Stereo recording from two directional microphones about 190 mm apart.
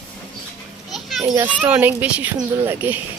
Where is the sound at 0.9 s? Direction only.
Centre (ahead or behind).